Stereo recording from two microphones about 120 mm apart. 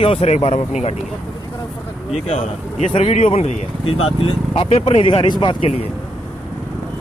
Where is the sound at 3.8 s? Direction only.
50° left (ahead or behind).